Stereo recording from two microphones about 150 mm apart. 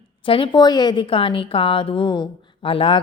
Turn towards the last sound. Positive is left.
turn(degrees=35)  # may be behind; listen again after turning